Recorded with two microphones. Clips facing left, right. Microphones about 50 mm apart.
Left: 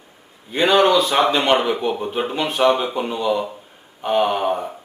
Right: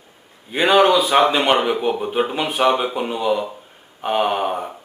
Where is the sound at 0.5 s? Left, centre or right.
Centre.